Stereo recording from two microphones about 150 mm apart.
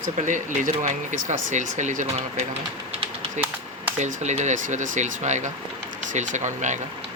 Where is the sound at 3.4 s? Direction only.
50° right (ahead or behind).